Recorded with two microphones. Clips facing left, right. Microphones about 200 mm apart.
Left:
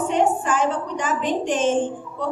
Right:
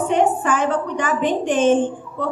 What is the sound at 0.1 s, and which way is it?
A woman's voice, 60° right (ahead or behind).